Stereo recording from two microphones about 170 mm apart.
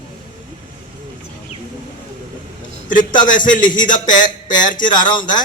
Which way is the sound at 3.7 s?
25° left (ahead or behind).